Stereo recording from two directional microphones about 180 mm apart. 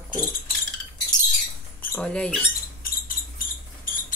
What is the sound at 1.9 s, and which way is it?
Speech, 5° left (ahead or behind).